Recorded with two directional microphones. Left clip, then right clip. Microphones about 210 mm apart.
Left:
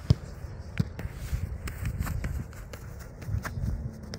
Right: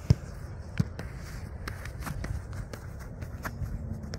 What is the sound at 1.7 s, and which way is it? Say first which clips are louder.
Run: even; 25° left (ahead or behind).